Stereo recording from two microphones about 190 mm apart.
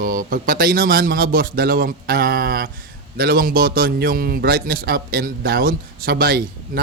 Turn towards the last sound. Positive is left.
turn(degrees=-50)  # may be behind; listen again after turning